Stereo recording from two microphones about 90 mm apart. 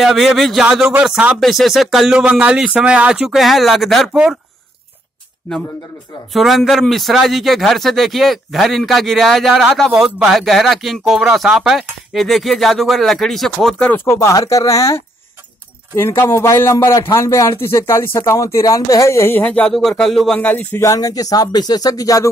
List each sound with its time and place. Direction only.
0.0 s speech: centre (ahead or behind)
1.4 s speech: centre (ahead or behind)
6.3 s speech: centre (ahead or behind)
13.8 s a man's voice: 25° left (ahead or behind)
19.4 s speech: 15° left (ahead or behind)
19.7 s speech: 5° left (ahead or behind)
20.3 s speech: 20° left (ahead or behind)
20.8 s speech: 40° left (ahead or behind)